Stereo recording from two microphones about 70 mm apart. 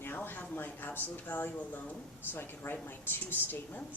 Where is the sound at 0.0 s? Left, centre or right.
Left.